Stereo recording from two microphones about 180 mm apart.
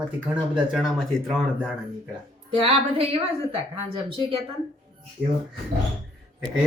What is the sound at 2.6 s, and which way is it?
A woman's voice, 35° right (ahead or behind).